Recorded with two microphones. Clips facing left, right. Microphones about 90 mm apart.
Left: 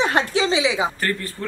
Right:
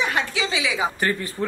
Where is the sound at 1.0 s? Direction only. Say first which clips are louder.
Right 2 dB; 15° right (ahead or behind).